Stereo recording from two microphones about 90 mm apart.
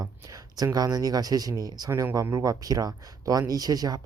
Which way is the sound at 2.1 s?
35° right (ahead or behind).